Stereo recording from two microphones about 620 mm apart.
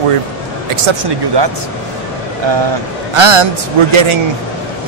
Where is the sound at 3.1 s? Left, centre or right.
Right.